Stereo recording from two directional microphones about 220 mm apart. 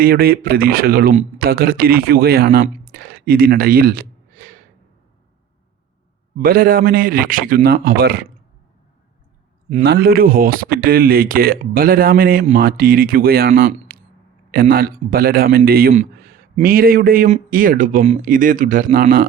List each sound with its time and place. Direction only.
0.0 s speech: 40° right (ahead or behind)
6.4 s speech: 40° right (ahead or behind)
9.8 s speech: 45° right (ahead or behind)